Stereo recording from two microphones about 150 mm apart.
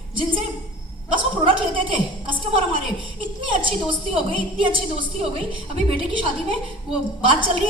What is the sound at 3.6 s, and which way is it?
A woman's voice, 35° right (ahead or behind).